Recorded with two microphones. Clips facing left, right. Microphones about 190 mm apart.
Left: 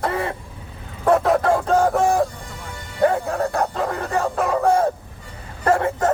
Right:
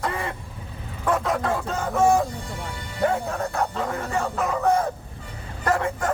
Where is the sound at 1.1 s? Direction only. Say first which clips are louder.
Left 7 dB; 40° left (ahead or behind).